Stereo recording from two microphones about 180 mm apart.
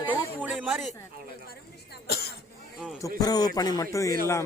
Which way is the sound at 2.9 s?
20° left (ahead or behind).